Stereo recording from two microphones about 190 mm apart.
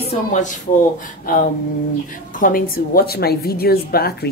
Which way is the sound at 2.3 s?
45° left (ahead or behind).